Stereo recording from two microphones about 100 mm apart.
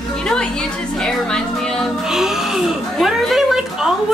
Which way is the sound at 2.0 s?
5° right (ahead or behind).